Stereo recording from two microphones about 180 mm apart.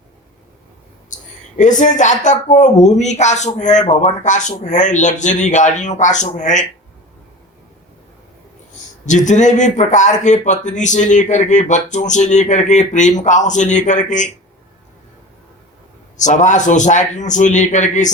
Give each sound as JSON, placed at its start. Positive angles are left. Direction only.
{"t": 1.5, "sound": "a man's voice", "side_deg": 45}
{"t": 9.0, "sound": "a man's voice", "side_deg": 40}
{"t": 16.1, "sound": "a man's voice", "side_deg": 40}